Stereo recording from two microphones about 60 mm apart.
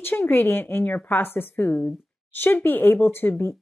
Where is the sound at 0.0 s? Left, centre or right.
Left.